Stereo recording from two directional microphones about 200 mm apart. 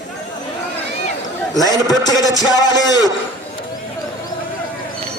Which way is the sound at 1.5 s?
20° left (ahead or behind).